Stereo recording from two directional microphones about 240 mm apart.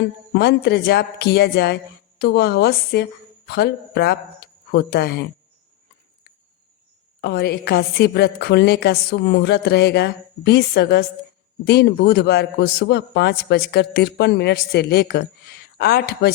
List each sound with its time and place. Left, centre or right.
0.3 s a man's voice: left
7.2 s a man's voice: left